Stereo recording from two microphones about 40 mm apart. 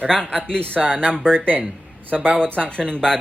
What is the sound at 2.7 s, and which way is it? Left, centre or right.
Speech, left.